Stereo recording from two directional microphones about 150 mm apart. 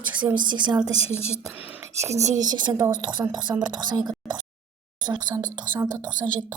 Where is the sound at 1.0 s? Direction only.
45° left (ahead or behind).